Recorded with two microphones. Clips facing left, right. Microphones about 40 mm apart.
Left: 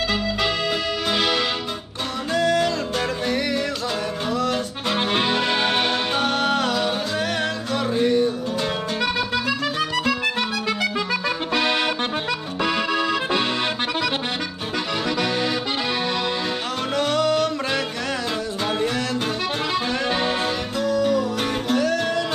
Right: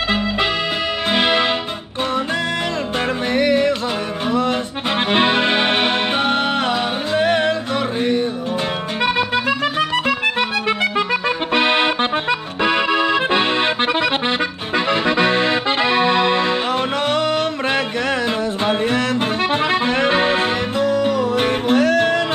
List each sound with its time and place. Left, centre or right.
1.1 s music: right
3.3 s music: right
4.3 s accordion: right
8.0 s music: right
10.8 s accordion: right
14.9 s accordion: right
17.1 s music: right
18.7 s music: right